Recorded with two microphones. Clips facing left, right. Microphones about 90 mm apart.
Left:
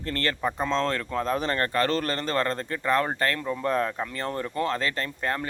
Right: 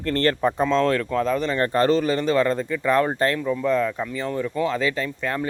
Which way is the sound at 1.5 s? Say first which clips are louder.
Right 7 dB; 20° right (ahead or behind).